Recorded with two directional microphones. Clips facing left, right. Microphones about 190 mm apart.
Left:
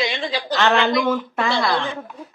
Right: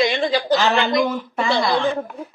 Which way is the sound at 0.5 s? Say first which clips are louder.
Left 2 dB; centre (ahead or behind).